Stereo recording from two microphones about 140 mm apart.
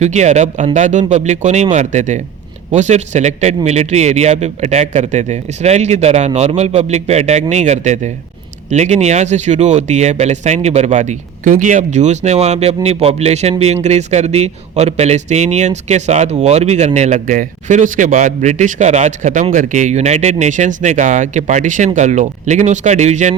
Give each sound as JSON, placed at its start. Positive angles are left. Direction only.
{"t": 0.0, "sound": "speech", "side_deg": -55}